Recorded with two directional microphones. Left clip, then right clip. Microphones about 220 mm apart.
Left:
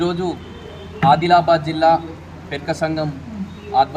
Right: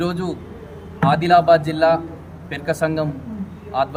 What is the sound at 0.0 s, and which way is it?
A man's voice, 20° right (ahead or behind).